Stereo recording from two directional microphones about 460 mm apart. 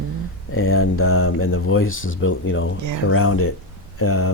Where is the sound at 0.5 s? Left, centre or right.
Left.